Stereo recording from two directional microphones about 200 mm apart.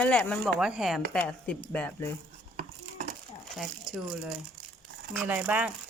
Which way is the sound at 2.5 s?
40° right (ahead or behind).